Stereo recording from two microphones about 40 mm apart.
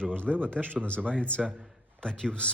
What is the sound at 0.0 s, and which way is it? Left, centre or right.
A man's voice, left.